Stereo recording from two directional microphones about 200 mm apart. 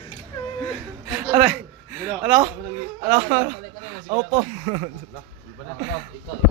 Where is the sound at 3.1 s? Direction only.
30° right (ahead or behind).